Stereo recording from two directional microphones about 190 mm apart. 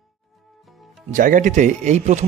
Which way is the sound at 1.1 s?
45° right (ahead or behind).